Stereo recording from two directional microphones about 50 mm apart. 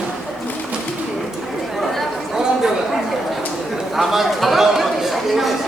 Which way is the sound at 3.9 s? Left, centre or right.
Centre.